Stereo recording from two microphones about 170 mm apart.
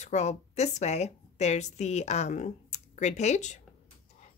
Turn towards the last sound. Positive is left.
turn(degrees=45)  # may be behind; listen again after turning